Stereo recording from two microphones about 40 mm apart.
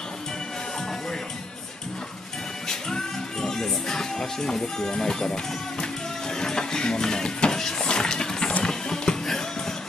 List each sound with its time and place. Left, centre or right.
2.7 s music: centre
6.3 s speech: centre
7.8 s a sound: left
8.6 s music: centre